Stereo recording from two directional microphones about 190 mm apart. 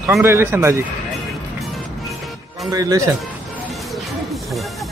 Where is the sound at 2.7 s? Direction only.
20° right (ahead or behind).